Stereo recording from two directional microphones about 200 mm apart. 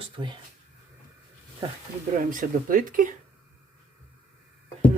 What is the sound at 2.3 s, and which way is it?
Speech, 45° right (ahead or behind).